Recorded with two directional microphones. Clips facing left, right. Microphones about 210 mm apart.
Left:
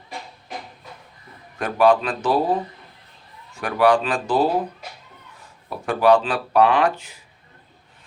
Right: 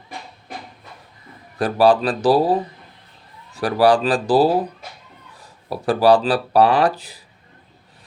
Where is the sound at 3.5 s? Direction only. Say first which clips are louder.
Right 2 dB; 35° right (ahead or behind).